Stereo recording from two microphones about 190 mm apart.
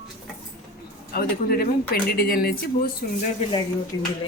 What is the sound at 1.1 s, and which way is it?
Speech, 50° left (ahead or behind).